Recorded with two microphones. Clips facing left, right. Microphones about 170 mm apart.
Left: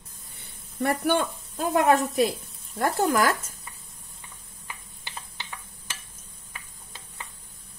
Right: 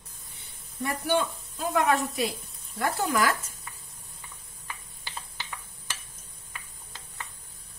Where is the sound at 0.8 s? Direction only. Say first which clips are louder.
Left 3 dB; 55° left (ahead or behind).